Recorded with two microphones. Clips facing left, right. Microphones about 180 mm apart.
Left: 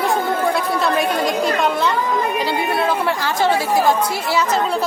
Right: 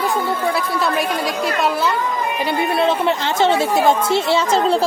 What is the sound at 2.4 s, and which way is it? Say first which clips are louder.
Speech: right 2 dB; 25° right (ahead or behind).